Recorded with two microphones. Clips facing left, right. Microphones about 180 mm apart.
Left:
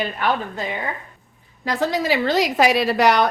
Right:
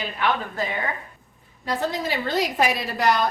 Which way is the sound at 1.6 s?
90° left.